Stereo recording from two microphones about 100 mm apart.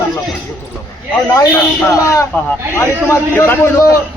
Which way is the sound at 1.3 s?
30° left (ahead or behind).